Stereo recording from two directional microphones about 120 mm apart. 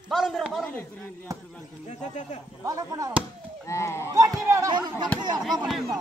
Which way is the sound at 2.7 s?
30° right (ahead or behind).